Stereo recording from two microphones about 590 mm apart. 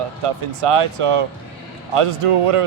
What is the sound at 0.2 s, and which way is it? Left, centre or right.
Speech, right.